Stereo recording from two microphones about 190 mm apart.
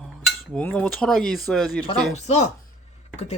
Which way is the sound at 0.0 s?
5° left (ahead or behind).